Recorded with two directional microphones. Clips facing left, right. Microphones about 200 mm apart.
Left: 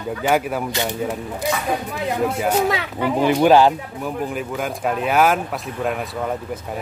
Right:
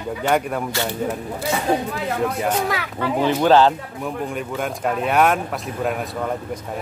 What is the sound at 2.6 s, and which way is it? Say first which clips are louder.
Speech: left 3 dB; 25° left (ahead or behind).